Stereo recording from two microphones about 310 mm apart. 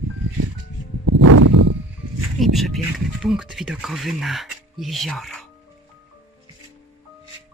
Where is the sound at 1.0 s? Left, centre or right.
Right.